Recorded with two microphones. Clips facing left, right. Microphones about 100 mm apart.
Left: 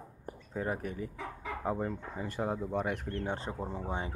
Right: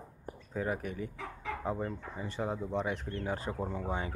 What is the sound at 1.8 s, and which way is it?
Speech, 50° left (ahead or behind).